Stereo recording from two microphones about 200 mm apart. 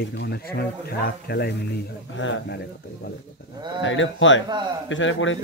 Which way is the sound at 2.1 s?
70° left (ahead or behind).